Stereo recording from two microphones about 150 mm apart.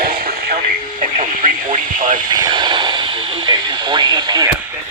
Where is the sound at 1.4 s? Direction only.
60° right (ahead or behind).